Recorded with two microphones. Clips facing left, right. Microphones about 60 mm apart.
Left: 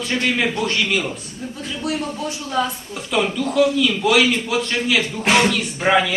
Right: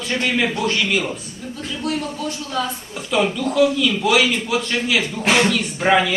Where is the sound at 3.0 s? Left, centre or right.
Centre.